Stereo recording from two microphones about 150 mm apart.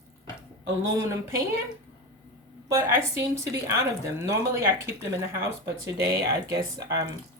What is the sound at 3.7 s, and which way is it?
Speech, 20° right (ahead or behind).